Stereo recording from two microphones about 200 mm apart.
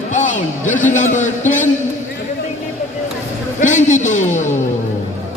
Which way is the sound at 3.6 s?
40° left (ahead or behind).